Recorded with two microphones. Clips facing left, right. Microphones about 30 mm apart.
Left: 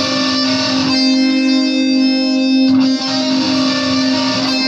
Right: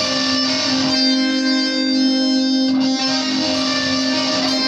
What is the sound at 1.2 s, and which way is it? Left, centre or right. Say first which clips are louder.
Music: left 5 dB; left.